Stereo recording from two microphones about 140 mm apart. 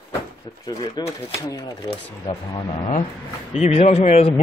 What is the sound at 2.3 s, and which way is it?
Speech, 45° left (ahead or behind).